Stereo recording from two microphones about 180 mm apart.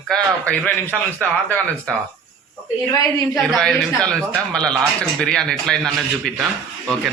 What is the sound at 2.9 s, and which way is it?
Speech, 15° left (ahead or behind).